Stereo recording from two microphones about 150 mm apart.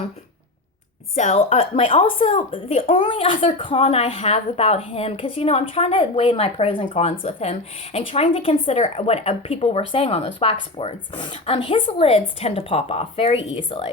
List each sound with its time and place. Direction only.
1.1 s speech: 50° left (ahead or behind)